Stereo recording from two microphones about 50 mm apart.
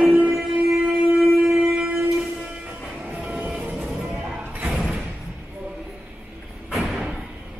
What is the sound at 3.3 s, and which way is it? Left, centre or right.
Vehicle, right.